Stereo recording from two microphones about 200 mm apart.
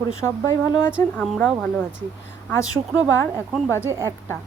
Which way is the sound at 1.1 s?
5° left (ahead or behind).